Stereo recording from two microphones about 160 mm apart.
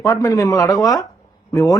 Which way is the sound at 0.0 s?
20° left (ahead or behind).